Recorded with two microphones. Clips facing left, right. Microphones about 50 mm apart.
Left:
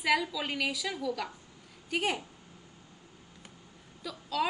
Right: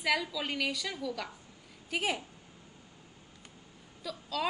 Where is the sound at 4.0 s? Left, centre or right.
Centre.